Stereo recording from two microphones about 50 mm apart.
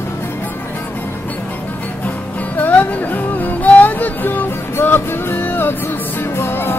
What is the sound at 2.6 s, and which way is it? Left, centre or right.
Music, left.